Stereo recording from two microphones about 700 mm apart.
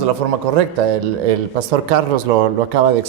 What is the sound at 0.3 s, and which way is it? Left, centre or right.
Speech, right.